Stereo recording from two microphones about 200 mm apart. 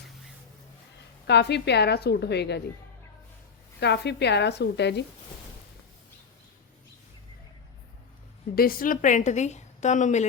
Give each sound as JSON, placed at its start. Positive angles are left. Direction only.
{"t": 1.3, "sound": "a woman's voice", "side_deg": 60}
{"t": 3.8, "sound": "a woman's voice", "side_deg": 60}
{"t": 8.5, "sound": "a woman's voice", "side_deg": 45}